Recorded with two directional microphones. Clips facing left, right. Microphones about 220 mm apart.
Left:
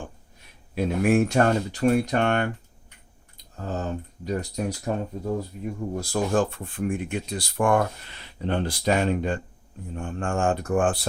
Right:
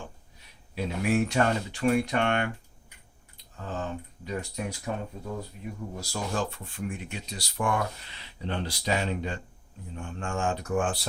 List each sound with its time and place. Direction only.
0.0 s speech: 50° left (ahead or behind)
3.5 s speech: 40° left (ahead or behind)
6.0 s speech: 50° left (ahead or behind)